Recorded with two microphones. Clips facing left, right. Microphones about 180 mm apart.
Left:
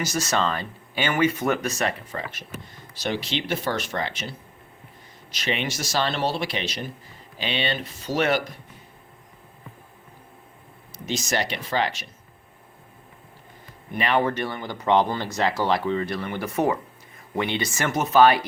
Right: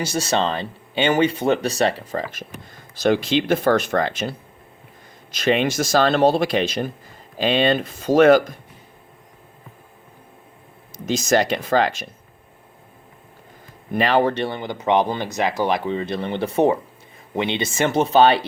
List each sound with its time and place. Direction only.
0.0 s speech: 30° right (ahead or behind)
3.0 s speech: 50° right (ahead or behind)
11.0 s speech: 45° right (ahead or behind)
13.9 s speech: 35° right (ahead or behind)